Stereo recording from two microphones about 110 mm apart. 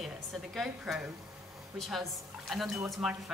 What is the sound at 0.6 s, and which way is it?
A woman's voice, 5° right (ahead or behind).